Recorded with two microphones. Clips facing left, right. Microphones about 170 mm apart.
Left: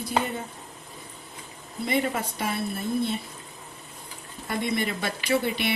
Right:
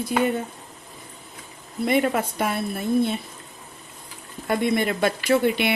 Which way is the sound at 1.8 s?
55° right (ahead or behind).